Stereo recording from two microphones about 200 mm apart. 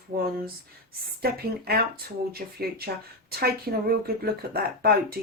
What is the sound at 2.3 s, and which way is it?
Speech, 50° right (ahead or behind).